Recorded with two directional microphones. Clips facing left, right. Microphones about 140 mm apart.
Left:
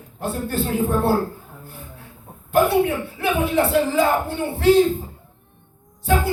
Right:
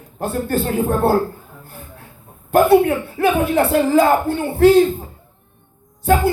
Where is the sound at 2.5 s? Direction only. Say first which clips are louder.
Right 5 dB; 45° right (ahead or behind).